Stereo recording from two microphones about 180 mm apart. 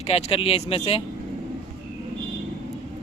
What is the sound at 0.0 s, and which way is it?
A man's voice, 35° left (ahead or behind).